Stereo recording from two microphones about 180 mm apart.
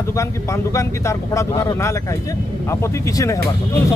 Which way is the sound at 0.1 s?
15° left (ahead or behind).